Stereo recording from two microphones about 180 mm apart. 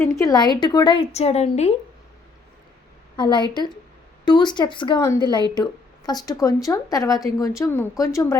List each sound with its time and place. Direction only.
0.0 s speech: 20° left (ahead or behind); by 1.7 s 35° left (ahead or behind)
3.2 s speech: 25° left (ahead or behind)